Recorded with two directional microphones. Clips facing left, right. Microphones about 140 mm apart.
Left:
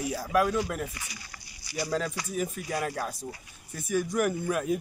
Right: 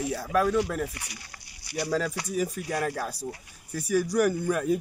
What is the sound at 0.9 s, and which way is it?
Speech, 65° right (ahead or behind).